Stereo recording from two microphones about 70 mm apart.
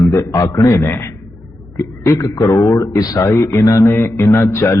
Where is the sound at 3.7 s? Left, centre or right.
Left.